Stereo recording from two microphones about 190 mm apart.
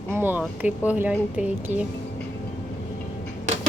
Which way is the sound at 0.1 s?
10° right (ahead or behind).